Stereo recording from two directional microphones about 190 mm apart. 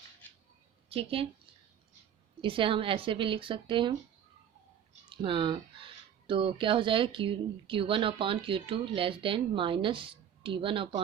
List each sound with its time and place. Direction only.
0.9 s speech: 30° right (ahead or behind)
2.4 s speech: 25° right (ahead or behind)
5.0 s speech: 25° right (ahead or behind)